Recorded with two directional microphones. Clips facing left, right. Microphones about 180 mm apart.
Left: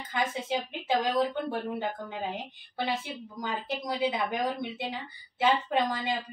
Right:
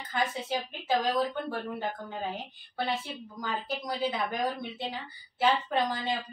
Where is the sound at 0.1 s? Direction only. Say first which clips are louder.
Left 1 dB; 20° left (ahead or behind).